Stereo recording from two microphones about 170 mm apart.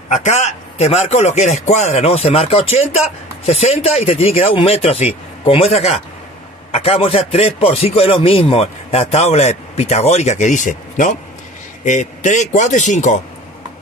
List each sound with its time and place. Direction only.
0.1 s a man's voice: 45° left (ahead or behind)